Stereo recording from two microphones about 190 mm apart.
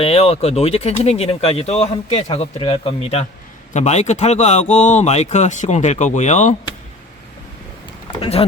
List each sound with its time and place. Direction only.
0.0 s speech: 30° left (ahead or behind)
8.1 s speech: 30° left (ahead or behind)